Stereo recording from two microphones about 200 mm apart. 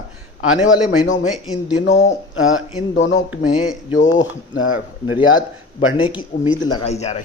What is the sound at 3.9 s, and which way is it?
Speech, 70° left (ahead or behind).